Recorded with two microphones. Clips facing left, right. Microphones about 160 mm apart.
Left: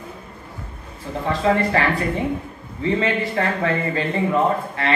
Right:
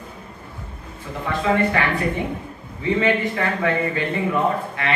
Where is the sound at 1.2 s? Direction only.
35° left (ahead or behind).